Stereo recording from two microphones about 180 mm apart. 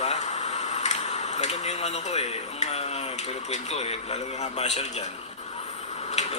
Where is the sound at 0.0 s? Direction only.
35° left (ahead or behind).